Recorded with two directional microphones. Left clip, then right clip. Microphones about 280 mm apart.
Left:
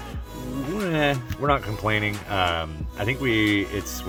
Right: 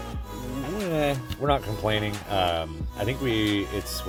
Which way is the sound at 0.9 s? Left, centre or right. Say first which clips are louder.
Left 3 dB; centre.